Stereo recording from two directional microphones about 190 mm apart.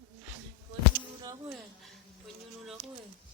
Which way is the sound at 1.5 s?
Centre (ahead or behind).